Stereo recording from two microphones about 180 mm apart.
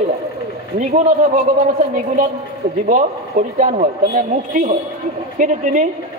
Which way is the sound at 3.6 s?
45° right (ahead or behind).